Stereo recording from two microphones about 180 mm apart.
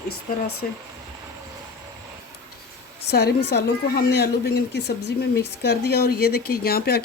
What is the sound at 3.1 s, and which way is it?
A woman's voice, 65° left (ahead or behind).